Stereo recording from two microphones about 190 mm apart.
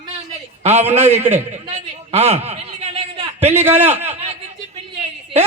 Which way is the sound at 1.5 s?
35° right (ahead or behind).